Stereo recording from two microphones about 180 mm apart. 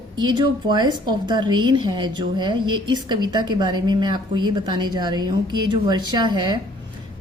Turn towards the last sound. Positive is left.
turn(degrees=-25)  # may be behind; listen again after turning